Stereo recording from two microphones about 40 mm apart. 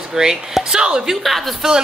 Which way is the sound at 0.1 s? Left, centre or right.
Centre.